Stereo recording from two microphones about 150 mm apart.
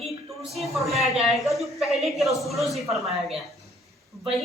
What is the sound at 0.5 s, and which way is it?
Speech, centre (ahead or behind).